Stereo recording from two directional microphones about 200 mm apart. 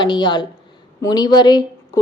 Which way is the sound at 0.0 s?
20° left (ahead or behind).